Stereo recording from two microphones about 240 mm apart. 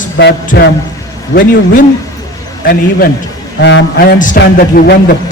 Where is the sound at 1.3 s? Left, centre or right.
Left.